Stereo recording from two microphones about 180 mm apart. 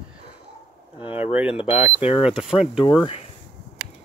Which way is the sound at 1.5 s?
30° left (ahead or behind).